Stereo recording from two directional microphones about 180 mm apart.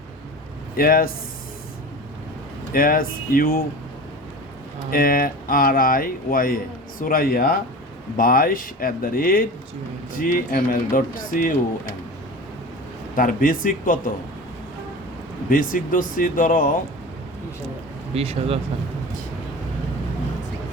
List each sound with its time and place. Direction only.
0.8 s speech: 55° left (ahead or behind)
2.7 s speech: 55° left (ahead or behind)
4.9 s speech: 55° left (ahead or behind)
13.1 s speech: 50° left (ahead or behind)
15.4 s speech: 50° left (ahead or behind)
18.1 s speech: 35° right (ahead or behind)